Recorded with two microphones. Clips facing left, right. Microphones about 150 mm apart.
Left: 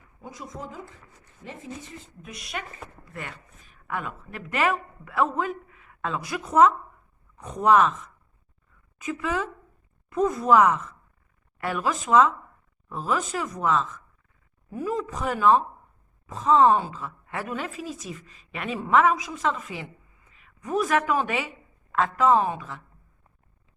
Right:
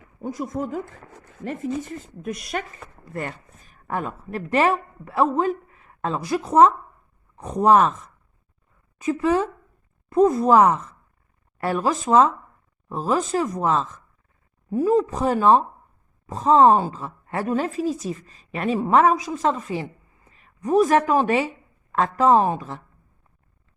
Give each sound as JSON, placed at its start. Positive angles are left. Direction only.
{"t": 0.2, "sound": "a woman's voice", "side_deg": -50}